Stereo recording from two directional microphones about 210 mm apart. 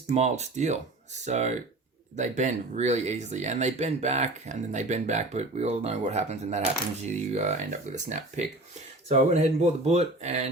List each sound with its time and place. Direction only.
0.1 s speech: 30° right (ahead or behind)